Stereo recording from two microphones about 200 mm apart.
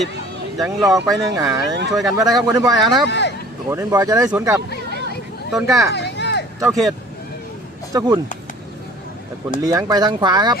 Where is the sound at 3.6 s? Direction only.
15° right (ahead or behind).